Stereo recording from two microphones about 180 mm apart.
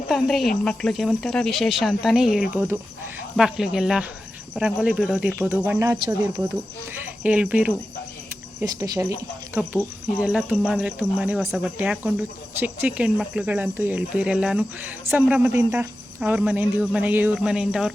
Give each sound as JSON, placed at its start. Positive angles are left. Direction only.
{"t": 0.1, "sound": "speech", "side_deg": 0}
{"t": 9.6, "sound": "speech", "side_deg": -10}